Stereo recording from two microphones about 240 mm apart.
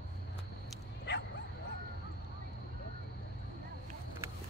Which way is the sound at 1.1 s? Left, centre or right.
Left.